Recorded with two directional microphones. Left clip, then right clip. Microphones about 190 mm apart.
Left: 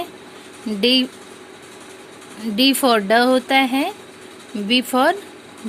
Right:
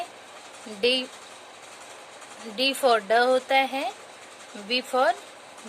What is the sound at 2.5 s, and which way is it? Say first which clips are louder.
Speech: left 6 dB; 15° left (ahead or behind).